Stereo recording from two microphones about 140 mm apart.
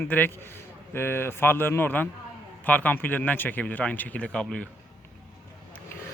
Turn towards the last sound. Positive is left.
turn(degrees=5)  # may be behind; listen again after turning